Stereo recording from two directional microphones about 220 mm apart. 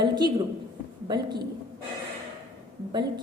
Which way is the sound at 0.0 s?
20° right (ahead or behind).